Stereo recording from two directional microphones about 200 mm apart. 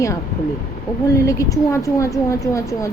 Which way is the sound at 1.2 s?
15° left (ahead or behind).